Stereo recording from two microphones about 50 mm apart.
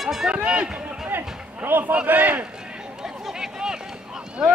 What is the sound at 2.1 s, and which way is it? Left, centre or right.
Crowd, right.